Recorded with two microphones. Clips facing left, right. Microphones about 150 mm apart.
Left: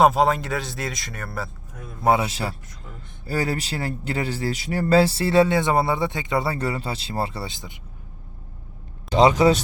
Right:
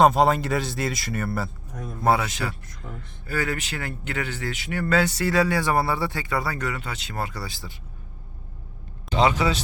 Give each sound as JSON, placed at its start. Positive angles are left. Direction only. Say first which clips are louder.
{"t": 0.0, "sound": "speech", "louder": "even", "side_deg": 0}
{"t": 2.2, "sound": "speech", "louder": "left 2 dB", "side_deg": 30}
{"t": 9.0, "sound": "speech", "louder": "left 5 dB", "side_deg": 40}